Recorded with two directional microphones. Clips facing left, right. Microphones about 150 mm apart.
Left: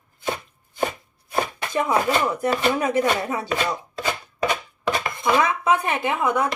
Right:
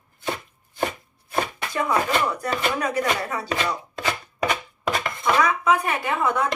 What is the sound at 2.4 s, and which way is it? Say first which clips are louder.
Speech: left 4 dB; 25° left (ahead or behind).